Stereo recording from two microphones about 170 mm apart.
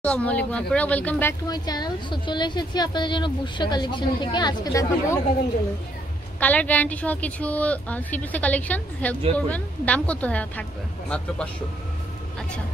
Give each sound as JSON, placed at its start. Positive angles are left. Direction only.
{"t": 0.0, "sound": "a woman's voice", "side_deg": 10}
{"t": 1.5, "sound": "a woman's voice", "side_deg": 25}
{"t": 6.4, "sound": "a woman's voice", "side_deg": 10}